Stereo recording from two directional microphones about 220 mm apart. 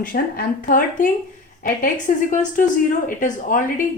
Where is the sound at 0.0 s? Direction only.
40° left (ahead or behind).